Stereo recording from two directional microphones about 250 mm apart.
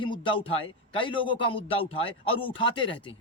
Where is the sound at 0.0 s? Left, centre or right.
Centre.